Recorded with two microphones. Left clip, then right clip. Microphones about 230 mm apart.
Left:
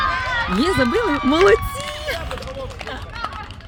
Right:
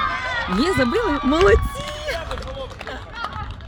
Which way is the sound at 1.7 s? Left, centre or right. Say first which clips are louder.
Left 1 dB; centre.